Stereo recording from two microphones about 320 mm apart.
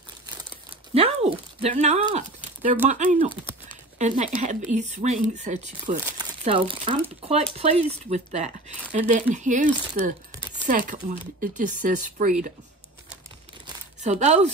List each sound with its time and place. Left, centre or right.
0.5 s a sound: centre
2.9 s speech: right
4.4 s speech: right
14.0 s speech: right